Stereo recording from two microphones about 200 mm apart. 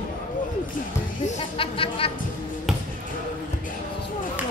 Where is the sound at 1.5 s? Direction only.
25° left (ahead or behind).